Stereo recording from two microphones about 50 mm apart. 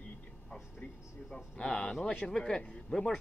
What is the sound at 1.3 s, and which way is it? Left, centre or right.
A man's voice, centre.